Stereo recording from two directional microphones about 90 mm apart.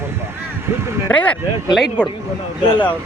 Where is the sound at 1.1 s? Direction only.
15° left (ahead or behind).